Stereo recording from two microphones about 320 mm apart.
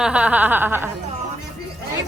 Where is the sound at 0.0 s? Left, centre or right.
Centre.